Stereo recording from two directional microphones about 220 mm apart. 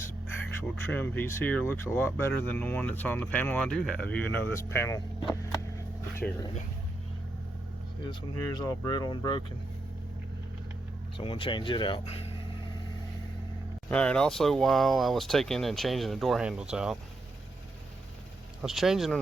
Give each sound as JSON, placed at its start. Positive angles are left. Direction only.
{"t": 0.9, "sound": "speech", "side_deg": 10}
{"t": 8.0, "sound": "speech", "side_deg": 20}
{"t": 11.2, "sound": "speech", "side_deg": 25}
{"t": 13.9, "sound": "speech", "side_deg": 5}
{"t": 18.6, "sound": "speech", "side_deg": 0}